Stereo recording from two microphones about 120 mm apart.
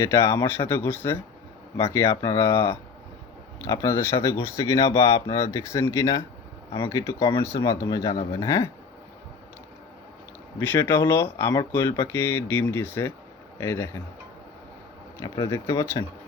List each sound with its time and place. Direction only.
0.0 s speech: 25° left (ahead or behind)
6.7 s speech: 45° left (ahead or behind)
6.9 s speech: 25° left (ahead or behind)
10.6 s speech: 15° left (ahead or behind)
15.2 s speech: 25° left (ahead or behind)